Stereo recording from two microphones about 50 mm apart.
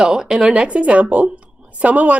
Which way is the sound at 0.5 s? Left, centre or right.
Right.